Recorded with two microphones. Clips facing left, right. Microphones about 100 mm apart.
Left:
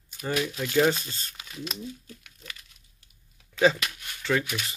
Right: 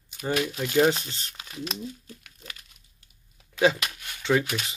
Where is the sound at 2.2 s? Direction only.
45° right (ahead or behind).